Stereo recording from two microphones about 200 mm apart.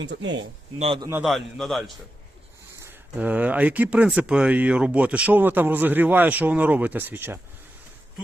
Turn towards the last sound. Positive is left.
turn(degrees=-10)  # may be behind; listen again after turning